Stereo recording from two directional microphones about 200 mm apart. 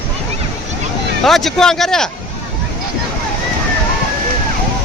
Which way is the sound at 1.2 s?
Centre (ahead or behind).